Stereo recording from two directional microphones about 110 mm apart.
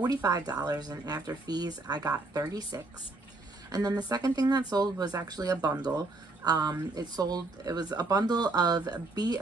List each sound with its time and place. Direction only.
0.0 s speech: 35° right (ahead or behind)